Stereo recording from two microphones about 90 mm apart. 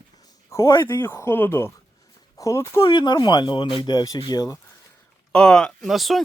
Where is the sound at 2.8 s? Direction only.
55° left (ahead or behind).